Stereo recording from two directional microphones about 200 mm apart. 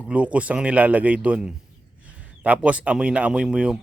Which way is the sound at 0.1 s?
5° right (ahead or behind).